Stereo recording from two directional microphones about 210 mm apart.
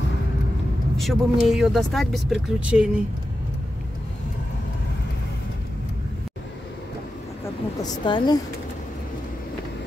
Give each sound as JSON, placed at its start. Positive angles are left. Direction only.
{"t": 0.9, "sound": "speech", "side_deg": 0}
{"t": 7.8, "sound": "a woman's voice", "side_deg": 20}